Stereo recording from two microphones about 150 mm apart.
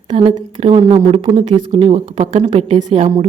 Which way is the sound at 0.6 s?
40° right (ahead or behind).